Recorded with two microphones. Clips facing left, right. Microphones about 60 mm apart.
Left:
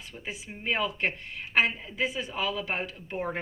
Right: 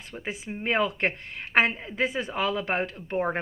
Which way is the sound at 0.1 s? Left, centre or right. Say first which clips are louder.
Right 6 dB; right.